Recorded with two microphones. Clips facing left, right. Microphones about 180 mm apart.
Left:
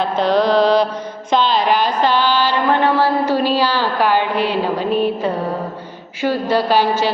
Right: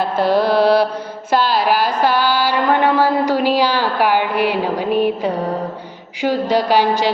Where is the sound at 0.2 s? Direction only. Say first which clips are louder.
Even; 10° right (ahead or behind).